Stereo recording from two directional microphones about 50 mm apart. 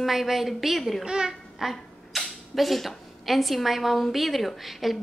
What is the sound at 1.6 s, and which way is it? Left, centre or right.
Speech, centre.